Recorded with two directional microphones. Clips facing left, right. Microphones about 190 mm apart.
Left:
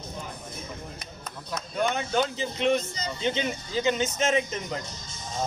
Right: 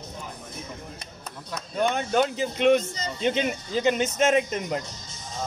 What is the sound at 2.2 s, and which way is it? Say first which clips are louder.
A man's voice: right 5 dB; 60° right (ahead or behind).